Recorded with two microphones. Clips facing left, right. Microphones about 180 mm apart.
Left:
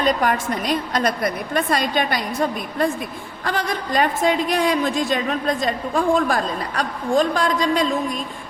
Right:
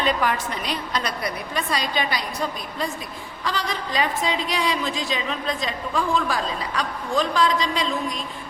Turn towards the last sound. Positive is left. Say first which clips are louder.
# left 3 dB
turn(degrees=50)  # may be behind; listen again after turning